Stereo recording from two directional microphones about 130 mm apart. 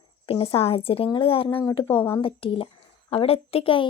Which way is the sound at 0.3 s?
45° left (ahead or behind).